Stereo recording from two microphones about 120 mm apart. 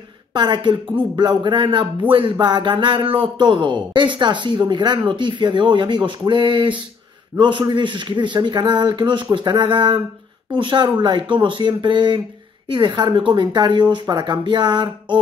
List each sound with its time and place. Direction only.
0.3 s speech: 40° right (ahead or behind)